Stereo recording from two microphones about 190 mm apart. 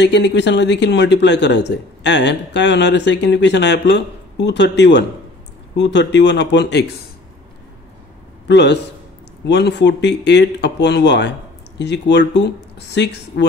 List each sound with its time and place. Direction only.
0.0 s speech: 65° left (ahead or behind)
8.5 s speech: 65° left (ahead or behind)